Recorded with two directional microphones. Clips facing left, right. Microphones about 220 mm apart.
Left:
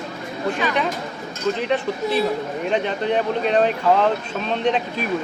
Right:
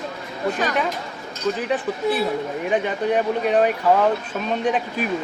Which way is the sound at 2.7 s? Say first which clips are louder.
Right 1 dB; 10° right (ahead or behind).